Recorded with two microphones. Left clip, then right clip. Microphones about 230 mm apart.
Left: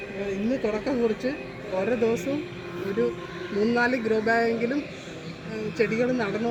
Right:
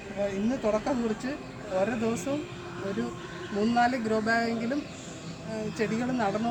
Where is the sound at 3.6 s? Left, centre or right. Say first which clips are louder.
Left 2 dB; right.